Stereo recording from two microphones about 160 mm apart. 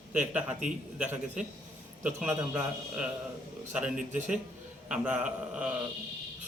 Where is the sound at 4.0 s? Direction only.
50° right (ahead or behind).